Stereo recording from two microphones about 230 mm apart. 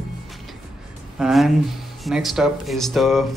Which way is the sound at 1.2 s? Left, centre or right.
Centre.